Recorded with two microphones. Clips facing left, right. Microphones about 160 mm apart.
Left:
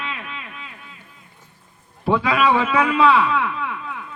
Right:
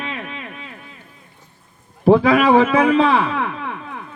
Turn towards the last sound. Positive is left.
turn(degrees=-40)  # may be behind; listen again after turning